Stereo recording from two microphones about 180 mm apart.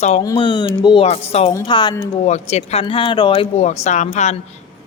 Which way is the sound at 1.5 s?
25° left (ahead or behind).